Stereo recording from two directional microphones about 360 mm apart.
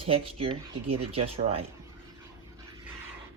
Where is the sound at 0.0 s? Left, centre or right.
Centre.